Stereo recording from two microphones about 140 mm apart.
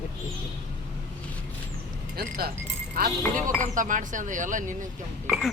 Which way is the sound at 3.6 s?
70° right (ahead or behind).